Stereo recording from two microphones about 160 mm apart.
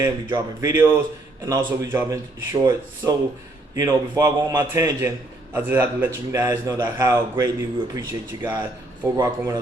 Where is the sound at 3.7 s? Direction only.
20° right (ahead or behind).